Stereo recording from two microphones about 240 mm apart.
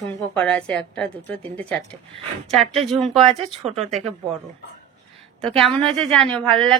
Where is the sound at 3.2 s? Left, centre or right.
Right.